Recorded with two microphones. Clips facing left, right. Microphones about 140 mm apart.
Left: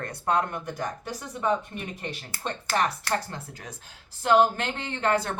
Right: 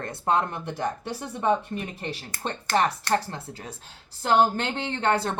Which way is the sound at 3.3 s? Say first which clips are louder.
Right 2 dB; 30° right (ahead or behind).